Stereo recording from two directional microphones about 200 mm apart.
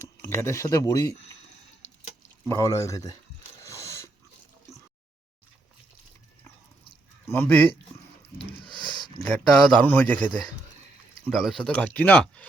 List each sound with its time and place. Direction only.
0.2 s speech: 15° left (ahead or behind)
2.5 s speech: 15° left (ahead or behind)
3.6 s a sound: 15° left (ahead or behind)
7.3 s speech: 10° left (ahead or behind)
9.2 s speech: 5° left (ahead or behind)